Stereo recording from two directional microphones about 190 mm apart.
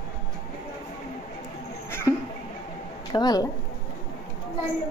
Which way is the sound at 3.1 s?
20° left (ahead or behind).